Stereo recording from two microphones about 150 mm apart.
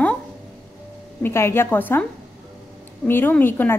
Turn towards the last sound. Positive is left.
turn(degrees=15)  # may be behind; listen again after turning